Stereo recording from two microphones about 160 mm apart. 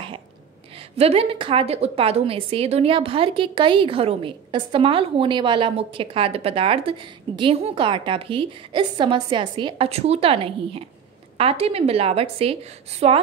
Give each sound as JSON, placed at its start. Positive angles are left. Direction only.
{"t": 0.9, "sound": "a woman's voice", "side_deg": -40}